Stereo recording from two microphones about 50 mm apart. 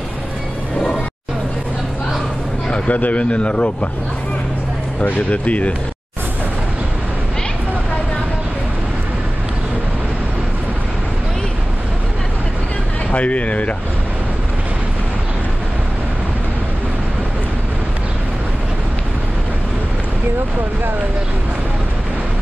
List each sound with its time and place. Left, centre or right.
2.7 s a man's voice: left
5.0 s a man's voice: left
13.1 s a man's voice: left